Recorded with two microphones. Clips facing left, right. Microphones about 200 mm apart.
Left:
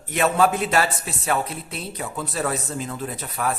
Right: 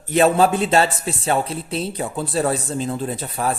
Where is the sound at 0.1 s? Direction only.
30° right (ahead or behind).